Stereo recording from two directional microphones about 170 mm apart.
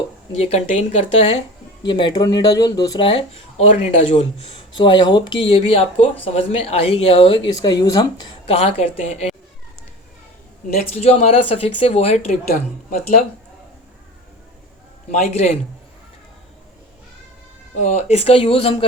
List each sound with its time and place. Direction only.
0.3 s a woman's voice: 40° left (ahead or behind)
1.9 s speech: 25° left (ahead or behind)
8.4 s a woman's voice: 35° left (ahead or behind)
10.9 s a woman's voice: 40° left (ahead or behind)
15.1 s a man's voice: 40° left (ahead or behind)
17.7 s a woman's voice: 45° left (ahead or behind)